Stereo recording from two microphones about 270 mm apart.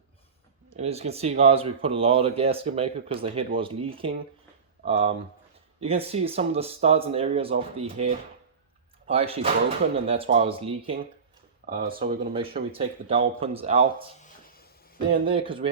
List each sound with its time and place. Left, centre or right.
0.8 s speech: right
14.2 s a sound: left
15.1 s speech: centre